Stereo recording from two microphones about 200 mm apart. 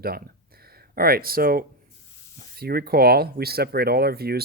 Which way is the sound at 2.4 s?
50° right (ahead or behind).